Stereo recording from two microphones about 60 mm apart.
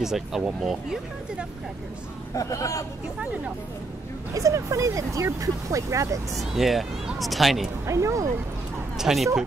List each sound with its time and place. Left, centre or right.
0.0 s speech: centre
2.3 s speech: left
4.3 s speech: right
6.5 s speech: centre
7.8 s speech: right
8.9 s speech: centre